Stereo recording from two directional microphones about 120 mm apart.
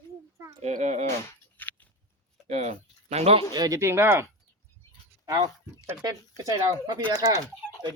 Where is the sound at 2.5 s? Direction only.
70° right (ahead or behind).